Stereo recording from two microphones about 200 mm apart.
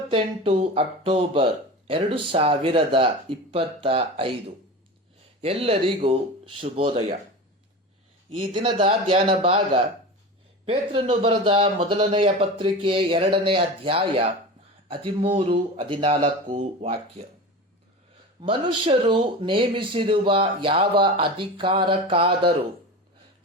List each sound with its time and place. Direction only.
0.1 s a man's voice: 30° right (ahead or behind)
8.4 s a man's voice: 25° right (ahead or behind)
18.4 s a man's voice: 25° right (ahead or behind)